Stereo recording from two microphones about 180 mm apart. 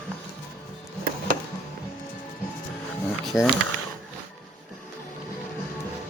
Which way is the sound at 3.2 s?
Centre (ahead or behind).